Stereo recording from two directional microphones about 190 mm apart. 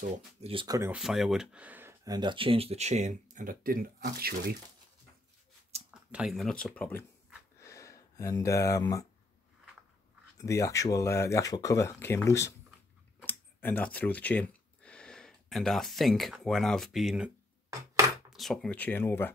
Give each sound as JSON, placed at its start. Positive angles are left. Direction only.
{"t": 0.0, "sound": "speech", "side_deg": -30}
{"t": 0.9, "sound": "speech", "side_deg": 0}
{"t": 5.7, "sound": "a sound", "side_deg": -35}
{"t": 6.1, "sound": "speech", "side_deg": 0}
{"t": 7.6, "sound": "a sound", "side_deg": 15}
{"t": 10.3, "sound": "speech", "side_deg": 15}
{"t": 18.3, "sound": "speech", "side_deg": 0}